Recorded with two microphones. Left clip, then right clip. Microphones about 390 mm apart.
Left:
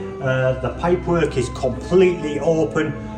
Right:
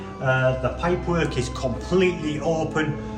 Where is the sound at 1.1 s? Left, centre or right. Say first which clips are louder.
Left 5 dB; centre.